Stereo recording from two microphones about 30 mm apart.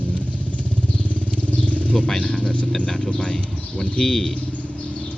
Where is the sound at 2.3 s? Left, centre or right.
Left.